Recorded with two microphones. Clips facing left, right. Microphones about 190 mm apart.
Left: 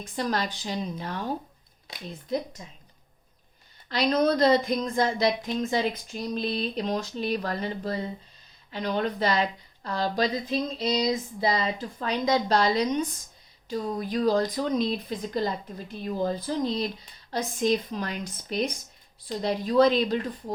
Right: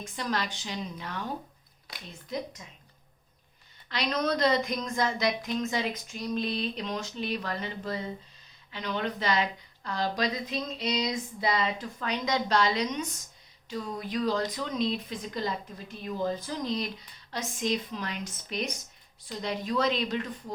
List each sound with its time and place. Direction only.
0.0 s a woman's voice: 40° left (ahead or behind)
1.9 s a sound: 25° left (ahead or behind)
2.6 s a woman's voice: 30° left (ahead or behind)
3.8 s a woman's voice: 30° left (ahead or behind)